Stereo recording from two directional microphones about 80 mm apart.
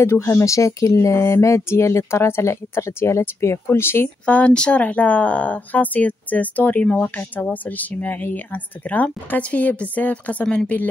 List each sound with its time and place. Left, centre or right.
0.0 s speech: left
4.3 s speech: centre